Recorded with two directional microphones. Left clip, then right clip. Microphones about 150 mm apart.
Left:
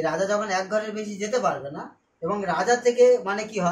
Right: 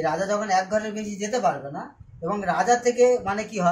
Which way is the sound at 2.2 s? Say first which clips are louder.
Right 1 dB; 10° left (ahead or behind).